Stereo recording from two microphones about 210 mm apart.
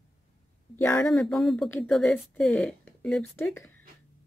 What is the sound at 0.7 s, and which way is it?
Speech, 5° left (ahead or behind).